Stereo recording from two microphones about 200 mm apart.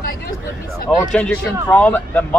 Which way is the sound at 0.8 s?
5° left (ahead or behind).